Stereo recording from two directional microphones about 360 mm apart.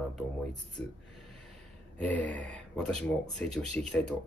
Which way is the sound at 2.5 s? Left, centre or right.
Centre.